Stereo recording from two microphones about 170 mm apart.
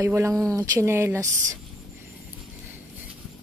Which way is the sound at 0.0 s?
15° right (ahead or behind).